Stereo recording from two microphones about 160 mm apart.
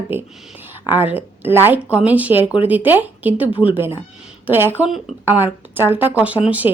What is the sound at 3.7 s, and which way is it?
Speech, 15° right (ahead or behind).